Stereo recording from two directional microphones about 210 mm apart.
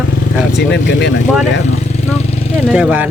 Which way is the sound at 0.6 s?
55° left (ahead or behind).